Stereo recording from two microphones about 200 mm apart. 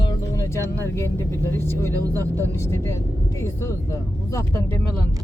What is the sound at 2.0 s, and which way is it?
Speech, 15° right (ahead or behind).